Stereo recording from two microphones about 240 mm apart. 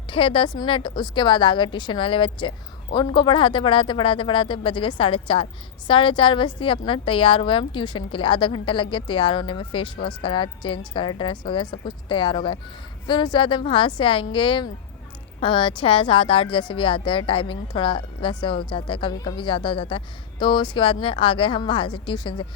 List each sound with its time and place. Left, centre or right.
0.1 s a woman's voice: left